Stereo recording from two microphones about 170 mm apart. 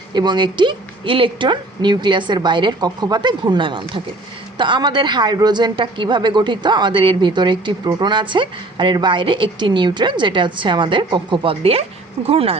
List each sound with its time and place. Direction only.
0.1 s a woman's voice: 25° right (ahead or behind)